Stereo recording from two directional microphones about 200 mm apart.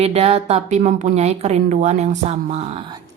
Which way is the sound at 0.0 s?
30° right (ahead or behind).